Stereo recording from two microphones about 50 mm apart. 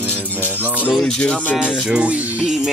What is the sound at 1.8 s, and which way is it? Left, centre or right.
Speech, right.